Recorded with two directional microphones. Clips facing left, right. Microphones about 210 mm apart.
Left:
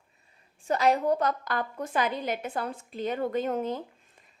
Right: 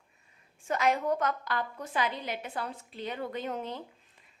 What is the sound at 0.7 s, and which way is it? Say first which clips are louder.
A woman's voice: left 4 dB; 35° left (ahead or behind).